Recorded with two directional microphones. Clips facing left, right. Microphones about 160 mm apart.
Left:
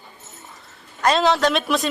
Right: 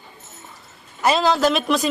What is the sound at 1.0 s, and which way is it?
Speech, 5° right (ahead or behind).